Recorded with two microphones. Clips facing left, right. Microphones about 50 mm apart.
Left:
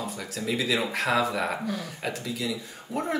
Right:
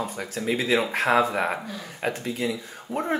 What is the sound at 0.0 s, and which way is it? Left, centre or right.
Speech, right.